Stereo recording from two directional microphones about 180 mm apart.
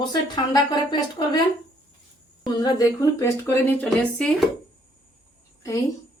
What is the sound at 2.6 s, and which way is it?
Speech, 20° left (ahead or behind).